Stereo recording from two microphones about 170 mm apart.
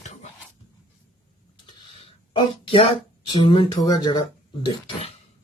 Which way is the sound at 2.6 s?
30° left (ahead or behind).